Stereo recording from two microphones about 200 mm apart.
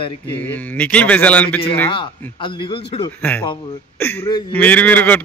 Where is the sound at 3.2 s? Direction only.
10° left (ahead or behind).